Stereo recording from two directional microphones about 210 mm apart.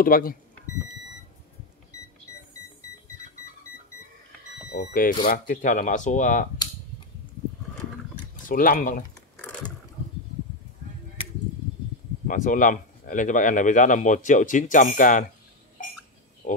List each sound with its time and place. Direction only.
0.0 s speech: 45° left (ahead or behind)
4.7 s speech: 40° left (ahead or behind)
8.5 s speech: 40° left (ahead or behind)
12.3 s speech: 40° left (ahead or behind)
16.4 s a sound: 40° left (ahead or behind)